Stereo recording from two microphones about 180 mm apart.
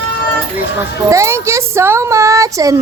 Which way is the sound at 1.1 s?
15° right (ahead or behind).